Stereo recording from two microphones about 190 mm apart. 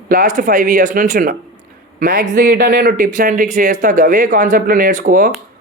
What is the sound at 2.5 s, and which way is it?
Speech, 60° right (ahead or behind).